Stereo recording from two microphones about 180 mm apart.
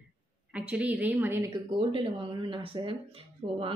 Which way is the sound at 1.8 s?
30° right (ahead or behind).